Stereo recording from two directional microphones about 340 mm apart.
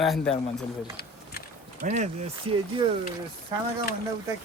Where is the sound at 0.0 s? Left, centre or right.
Centre.